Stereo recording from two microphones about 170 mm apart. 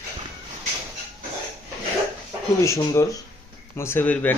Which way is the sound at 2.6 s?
15° left (ahead or behind).